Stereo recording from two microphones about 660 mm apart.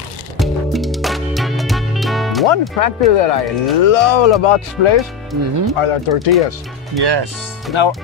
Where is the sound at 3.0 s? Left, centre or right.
Left.